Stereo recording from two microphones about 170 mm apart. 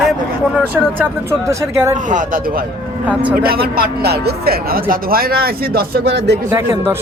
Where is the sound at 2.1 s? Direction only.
50° right (ahead or behind).